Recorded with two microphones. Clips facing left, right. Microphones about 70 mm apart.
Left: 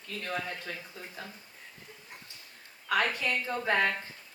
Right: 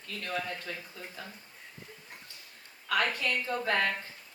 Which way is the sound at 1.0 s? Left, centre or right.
Left.